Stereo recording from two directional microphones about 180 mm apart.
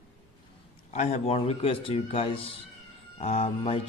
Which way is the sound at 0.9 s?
40° left (ahead or behind).